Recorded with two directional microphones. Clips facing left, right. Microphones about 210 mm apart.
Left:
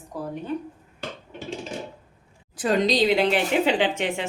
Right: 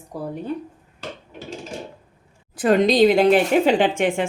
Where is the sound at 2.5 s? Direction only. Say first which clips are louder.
Right 6 dB; 55° right (ahead or behind).